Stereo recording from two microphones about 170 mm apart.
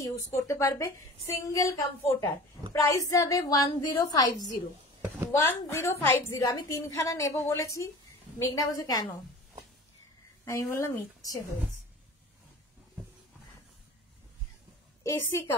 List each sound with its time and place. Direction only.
0.0 s a woman's voice: 15° left (ahead or behind)
5.3 s a woman's voice: 15° left (ahead or behind)
10.4 s a woman's voice: 15° left (ahead or behind)
15.0 s a woman's voice: 15° left (ahead or behind)